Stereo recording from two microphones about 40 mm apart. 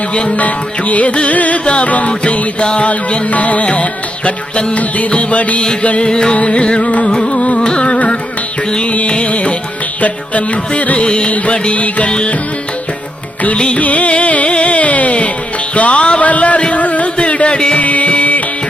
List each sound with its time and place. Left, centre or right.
0.1 s music: left
0.3 s music: left
6.1 s music: left
7.3 s carnatic music: left
8.7 s music: left
11.0 s music: left
13.7 s music: left